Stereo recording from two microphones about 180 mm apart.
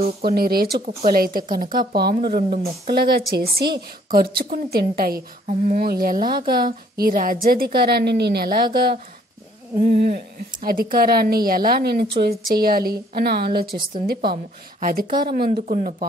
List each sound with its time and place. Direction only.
0.2 s speech: 55° right (ahead or behind)
9.8 s speech: 55° right (ahead or behind)